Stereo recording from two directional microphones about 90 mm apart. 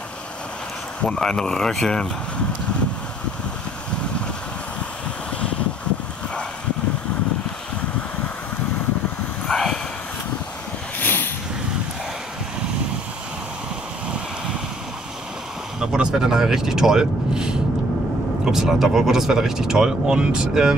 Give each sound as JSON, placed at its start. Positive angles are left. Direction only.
{"t": 1.0, "sound": "speech", "side_deg": 5}
{"t": 9.5, "sound": "a sound", "side_deg": 5}
{"t": 11.0, "sound": "vehicle", "side_deg": 20}
{"t": 15.8, "sound": "speech", "side_deg": -10}